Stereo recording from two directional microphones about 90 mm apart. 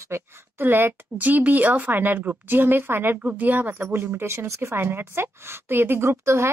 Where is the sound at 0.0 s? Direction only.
25° right (ahead or behind).